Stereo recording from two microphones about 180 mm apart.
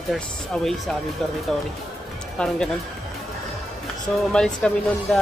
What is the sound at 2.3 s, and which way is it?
Speech, 5° left (ahead or behind).